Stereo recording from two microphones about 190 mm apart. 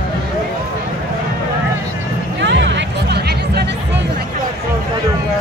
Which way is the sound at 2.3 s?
65° right (ahead or behind).